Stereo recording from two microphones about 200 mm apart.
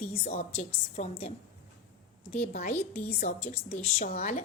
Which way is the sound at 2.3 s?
35° left (ahead or behind).